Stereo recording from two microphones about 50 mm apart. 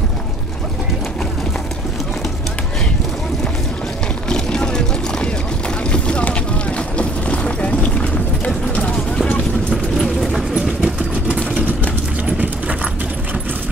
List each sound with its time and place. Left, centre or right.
4.3 s clip-clop: centre
5.9 s vehicle: left
7.0 s boat: left
8.7 s a sound: centre
9.9 s clip-clop: centre
10.5 s vehicle: centre
12.3 s clip-clop: right